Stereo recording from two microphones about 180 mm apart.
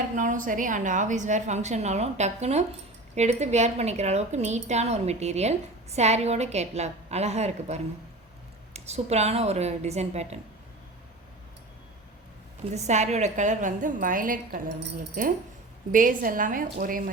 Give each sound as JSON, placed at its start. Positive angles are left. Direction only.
{"t": 0.2, "sound": "a woman's voice", "side_deg": -45}
{"t": 12.7, "sound": "a woman's voice", "side_deg": -40}